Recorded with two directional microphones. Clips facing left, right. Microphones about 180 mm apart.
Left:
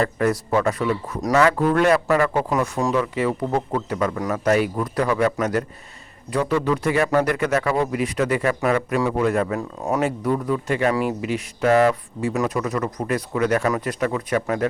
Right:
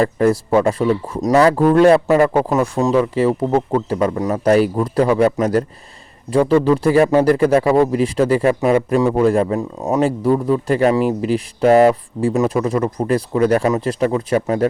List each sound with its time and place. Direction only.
0.0 s a man's voice: 30° right (ahead or behind)
9.6 s speech: 20° right (ahead or behind)
10.0 s a man's voice: 30° right (ahead or behind)